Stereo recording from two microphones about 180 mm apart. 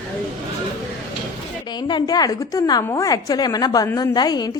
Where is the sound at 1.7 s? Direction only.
25° left (ahead or behind).